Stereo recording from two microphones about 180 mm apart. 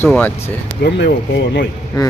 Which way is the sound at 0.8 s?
70° left (ahead or behind).